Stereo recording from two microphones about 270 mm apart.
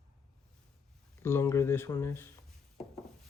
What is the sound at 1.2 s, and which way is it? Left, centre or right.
Speech, centre.